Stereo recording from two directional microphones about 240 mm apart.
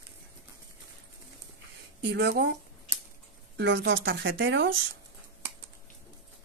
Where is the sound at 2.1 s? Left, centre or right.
Right.